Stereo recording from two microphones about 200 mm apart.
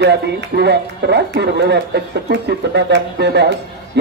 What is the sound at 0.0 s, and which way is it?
Speech, 55° right (ahead or behind).